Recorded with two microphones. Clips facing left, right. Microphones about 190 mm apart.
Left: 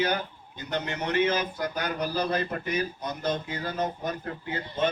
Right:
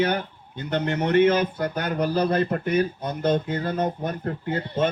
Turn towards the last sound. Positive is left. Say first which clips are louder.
# right 5 dB
turn(degrees=-50)  # may be behind; listen again after turning